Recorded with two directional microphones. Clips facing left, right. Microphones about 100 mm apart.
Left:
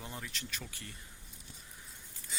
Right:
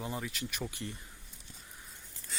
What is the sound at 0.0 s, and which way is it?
Speech, 5° right (ahead or behind).